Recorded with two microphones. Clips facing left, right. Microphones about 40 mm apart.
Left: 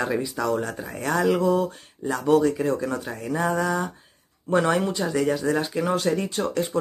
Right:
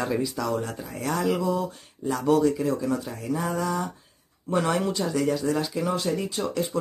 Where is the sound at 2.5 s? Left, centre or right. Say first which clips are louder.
Left 1 dB; left.